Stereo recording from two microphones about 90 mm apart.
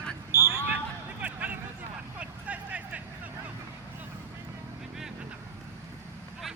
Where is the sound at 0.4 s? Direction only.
25° right (ahead or behind).